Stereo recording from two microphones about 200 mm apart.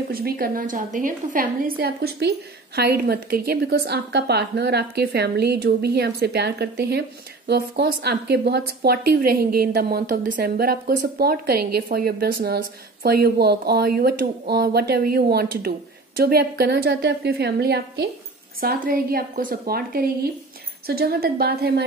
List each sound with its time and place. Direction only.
0.1 s a woman's voice: 45° right (ahead or behind)